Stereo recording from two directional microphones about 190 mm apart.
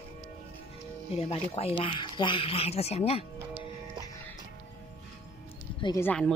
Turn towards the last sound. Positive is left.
turn(degrees=5)  # may be behind; listen again after turning